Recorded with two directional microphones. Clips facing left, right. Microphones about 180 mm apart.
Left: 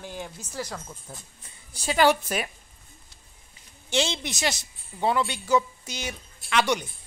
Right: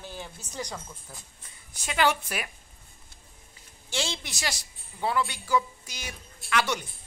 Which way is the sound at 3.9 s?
20° left (ahead or behind).